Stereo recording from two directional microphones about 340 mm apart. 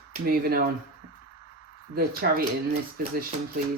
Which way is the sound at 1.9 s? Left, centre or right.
Right.